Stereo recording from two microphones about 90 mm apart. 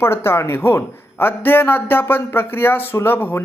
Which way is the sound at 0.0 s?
25° left (ahead or behind).